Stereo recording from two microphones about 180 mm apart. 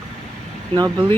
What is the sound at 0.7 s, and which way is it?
Speech, 20° right (ahead or behind).